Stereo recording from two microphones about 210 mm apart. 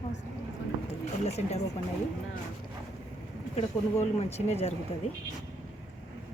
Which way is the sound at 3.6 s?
30° left (ahead or behind).